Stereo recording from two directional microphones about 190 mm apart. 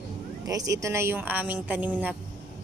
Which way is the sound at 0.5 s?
20° right (ahead or behind).